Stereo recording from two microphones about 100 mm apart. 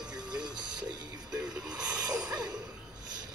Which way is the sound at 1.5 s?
5° right (ahead or behind).